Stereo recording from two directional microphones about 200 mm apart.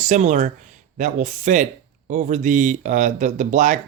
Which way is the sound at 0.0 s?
35° right (ahead or behind).